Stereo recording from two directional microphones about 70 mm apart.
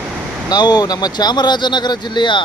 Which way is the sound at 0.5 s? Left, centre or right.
Left.